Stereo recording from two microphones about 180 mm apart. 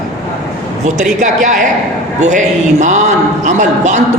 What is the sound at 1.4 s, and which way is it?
A woman's voice, 45° right (ahead or behind).